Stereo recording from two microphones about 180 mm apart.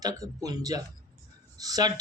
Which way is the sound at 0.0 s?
20° right (ahead or behind).